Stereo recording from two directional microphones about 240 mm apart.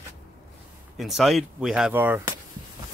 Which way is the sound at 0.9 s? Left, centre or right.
Centre.